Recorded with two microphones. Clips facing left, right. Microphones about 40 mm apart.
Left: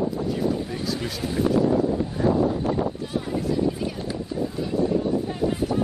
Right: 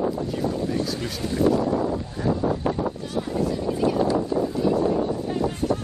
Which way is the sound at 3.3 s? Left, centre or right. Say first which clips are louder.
Even; centre.